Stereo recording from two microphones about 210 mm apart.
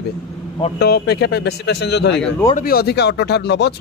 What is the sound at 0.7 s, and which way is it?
Speech, 50° left (ahead or behind).